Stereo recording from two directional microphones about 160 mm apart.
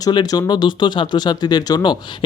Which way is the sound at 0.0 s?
25° left (ahead or behind).